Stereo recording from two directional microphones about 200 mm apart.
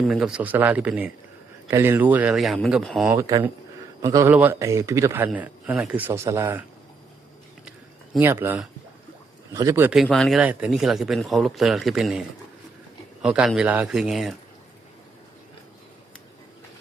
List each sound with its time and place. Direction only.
0.1 s a man's voice: 5° right (ahead or behind)
3.2 s a man's voice: 15° right (ahead or behind)
8.2 s a man's voice: 10° right (ahead or behind)
13.2 s speech: 5° right (ahead or behind)